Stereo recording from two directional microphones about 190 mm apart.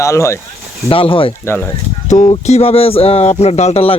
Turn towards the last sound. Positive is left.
turn(degrees=30)  # may be behind; listen again after turning